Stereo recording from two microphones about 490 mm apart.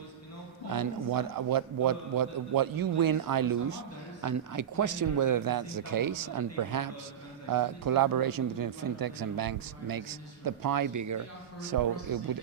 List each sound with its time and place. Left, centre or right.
0.7 s a man's voice: right